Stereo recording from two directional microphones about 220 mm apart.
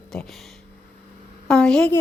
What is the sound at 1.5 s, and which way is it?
Speech, 5° left (ahead or behind).